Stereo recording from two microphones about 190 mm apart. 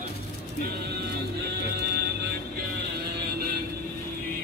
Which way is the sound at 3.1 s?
55° right (ahead or behind).